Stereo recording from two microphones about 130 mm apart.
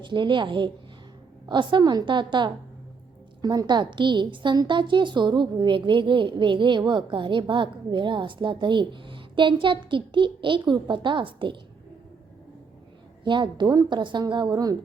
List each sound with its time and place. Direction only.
0.0 s a woman's voice: 35° right (ahead or behind)
13.2 s a woman's voice: 35° right (ahead or behind)